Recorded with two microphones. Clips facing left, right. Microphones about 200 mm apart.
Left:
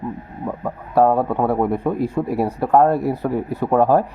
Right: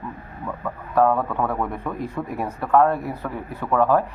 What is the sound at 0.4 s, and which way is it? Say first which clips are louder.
A man's voice: left 4 dB; 35° left (ahead or behind).